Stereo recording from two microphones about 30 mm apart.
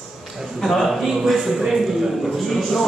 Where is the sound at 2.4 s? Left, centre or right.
Centre.